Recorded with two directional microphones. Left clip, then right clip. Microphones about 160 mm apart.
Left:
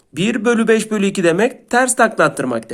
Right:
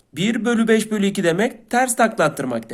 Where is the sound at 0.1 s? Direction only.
35° left (ahead or behind).